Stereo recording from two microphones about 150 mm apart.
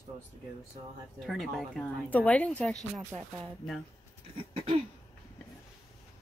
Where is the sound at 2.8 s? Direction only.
25° right (ahead or behind).